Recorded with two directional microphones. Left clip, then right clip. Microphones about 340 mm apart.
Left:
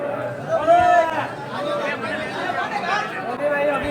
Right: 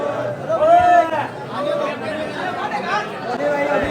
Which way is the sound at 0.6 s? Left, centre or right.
Centre.